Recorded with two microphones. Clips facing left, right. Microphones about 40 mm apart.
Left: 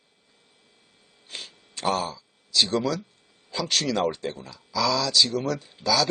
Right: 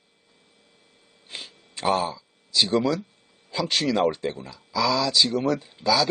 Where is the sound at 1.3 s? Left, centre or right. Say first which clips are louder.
Right 1 dB; centre.